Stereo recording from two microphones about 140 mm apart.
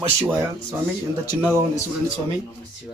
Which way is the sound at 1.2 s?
20° right (ahead or behind).